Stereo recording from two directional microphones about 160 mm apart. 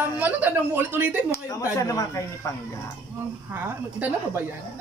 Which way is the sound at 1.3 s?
20° left (ahead or behind).